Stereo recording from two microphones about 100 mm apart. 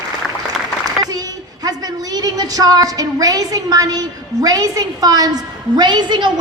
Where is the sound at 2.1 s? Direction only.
40° right (ahead or behind).